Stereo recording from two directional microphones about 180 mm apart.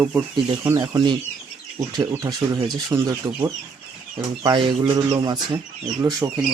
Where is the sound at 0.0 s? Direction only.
15° right (ahead or behind).